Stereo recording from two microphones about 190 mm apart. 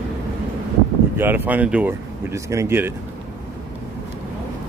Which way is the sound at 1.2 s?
10° right (ahead or behind).